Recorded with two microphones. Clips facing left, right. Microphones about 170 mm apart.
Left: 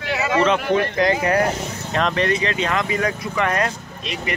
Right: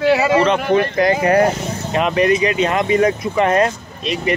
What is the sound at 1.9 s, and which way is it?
Speech, 10° right (ahead or behind).